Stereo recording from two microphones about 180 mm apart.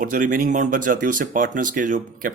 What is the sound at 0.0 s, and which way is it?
Speech, 45° right (ahead or behind).